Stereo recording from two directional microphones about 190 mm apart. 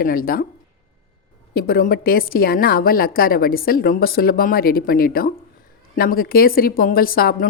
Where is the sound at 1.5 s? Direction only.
50° left (ahead or behind).